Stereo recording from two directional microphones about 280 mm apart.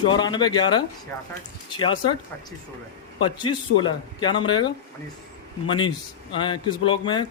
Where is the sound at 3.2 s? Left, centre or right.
Centre.